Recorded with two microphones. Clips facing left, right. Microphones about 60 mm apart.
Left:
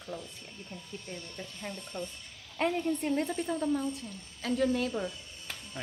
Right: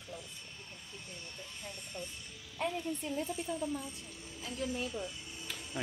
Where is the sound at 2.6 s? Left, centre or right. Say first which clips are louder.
Left 7 dB; left.